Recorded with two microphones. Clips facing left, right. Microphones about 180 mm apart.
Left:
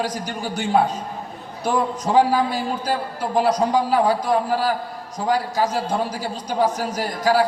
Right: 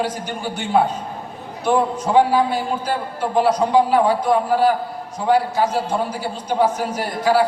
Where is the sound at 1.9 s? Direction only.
40° left (ahead or behind).